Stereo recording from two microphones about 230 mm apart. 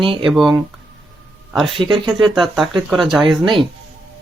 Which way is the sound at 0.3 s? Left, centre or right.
Centre.